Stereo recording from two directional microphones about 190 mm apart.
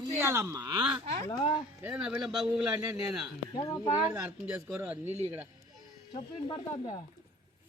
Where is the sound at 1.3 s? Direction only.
30° left (ahead or behind).